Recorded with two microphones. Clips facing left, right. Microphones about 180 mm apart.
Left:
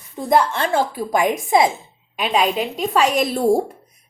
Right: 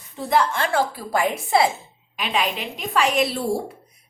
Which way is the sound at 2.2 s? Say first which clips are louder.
Left 6 dB; 40° left (ahead or behind).